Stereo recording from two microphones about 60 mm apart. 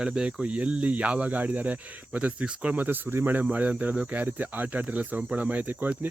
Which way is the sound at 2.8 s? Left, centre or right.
Right.